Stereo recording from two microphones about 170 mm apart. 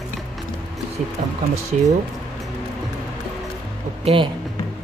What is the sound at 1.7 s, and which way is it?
Speech, 45° right (ahead or behind).